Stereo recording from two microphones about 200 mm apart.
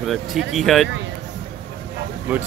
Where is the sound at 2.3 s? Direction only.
10° right (ahead or behind).